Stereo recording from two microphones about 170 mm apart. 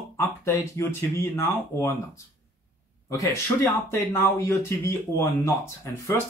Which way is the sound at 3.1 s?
15° left (ahead or behind).